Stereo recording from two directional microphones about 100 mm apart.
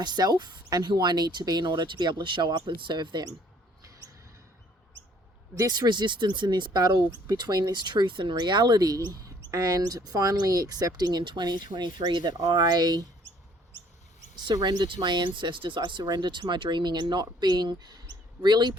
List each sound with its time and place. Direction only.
0.0 s speech: 45° right (ahead or behind)
5.5 s speech: 40° right (ahead or behind)
14.4 s speech: 40° right (ahead or behind)